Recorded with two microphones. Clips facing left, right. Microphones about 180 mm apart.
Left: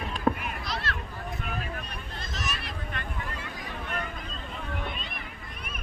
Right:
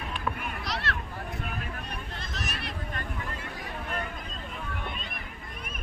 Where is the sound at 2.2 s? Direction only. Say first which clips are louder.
Left 3 dB; 60° right (ahead or behind).